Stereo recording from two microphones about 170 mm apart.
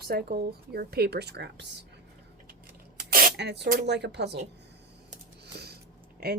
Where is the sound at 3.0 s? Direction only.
60° right (ahead or behind); by 3.6 s 80° right.